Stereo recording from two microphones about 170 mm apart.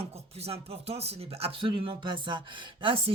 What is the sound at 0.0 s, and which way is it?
Speech, 35° right (ahead or behind).